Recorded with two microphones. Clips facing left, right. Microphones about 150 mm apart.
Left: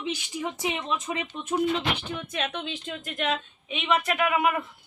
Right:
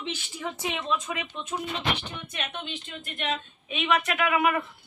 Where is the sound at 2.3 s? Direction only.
90° left.